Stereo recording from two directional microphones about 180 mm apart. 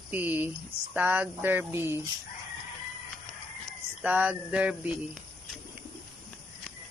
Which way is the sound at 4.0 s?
10° right (ahead or behind).